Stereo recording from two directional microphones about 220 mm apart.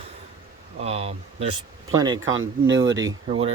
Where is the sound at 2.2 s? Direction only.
60° right (ahead or behind).